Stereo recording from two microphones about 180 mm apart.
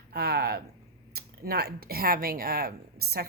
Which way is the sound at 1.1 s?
60° right (ahead or behind).